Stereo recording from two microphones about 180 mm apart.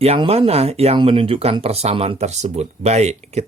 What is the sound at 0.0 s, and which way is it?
Speech, 35° right (ahead or behind).